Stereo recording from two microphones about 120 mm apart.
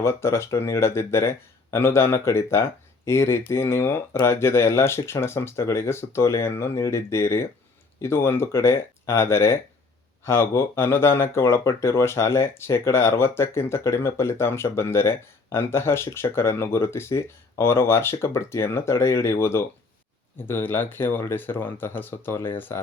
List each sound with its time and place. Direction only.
0.0 s speech: 20° left (ahead or behind)